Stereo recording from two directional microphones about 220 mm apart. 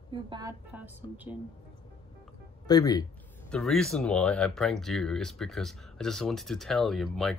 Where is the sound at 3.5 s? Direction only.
5° left (ahead or behind).